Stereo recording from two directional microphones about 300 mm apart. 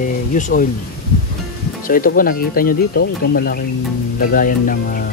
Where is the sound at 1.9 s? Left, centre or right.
Left.